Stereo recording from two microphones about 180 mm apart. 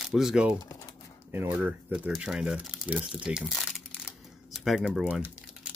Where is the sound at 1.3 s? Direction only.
10° right (ahead or behind).